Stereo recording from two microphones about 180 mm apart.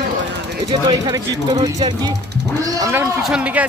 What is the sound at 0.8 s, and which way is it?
A man's voice, 20° right (ahead or behind).